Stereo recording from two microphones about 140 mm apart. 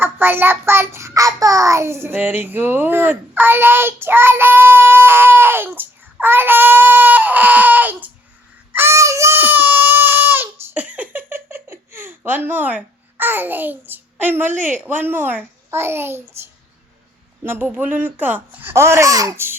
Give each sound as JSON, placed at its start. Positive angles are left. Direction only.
{"t": 0.0, "sound": "child singing", "side_deg": -15}
{"t": 8.7, "sound": "a sound", "side_deg": -20}
{"t": 11.4, "sound": "babbling", "side_deg": -15}
{"t": 14.6, "sound": "child singing", "side_deg": -15}
{"t": 17.4, "sound": "child singing", "side_deg": -15}